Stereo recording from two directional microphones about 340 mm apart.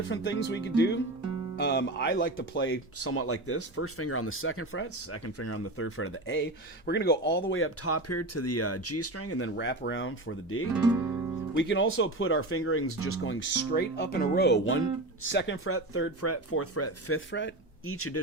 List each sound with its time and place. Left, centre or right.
0.1 s speech: left